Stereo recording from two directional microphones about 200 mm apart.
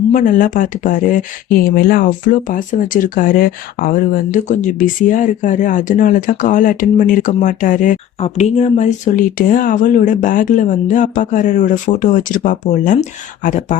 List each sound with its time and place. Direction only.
0.1 s speech: 40° left (ahead or behind)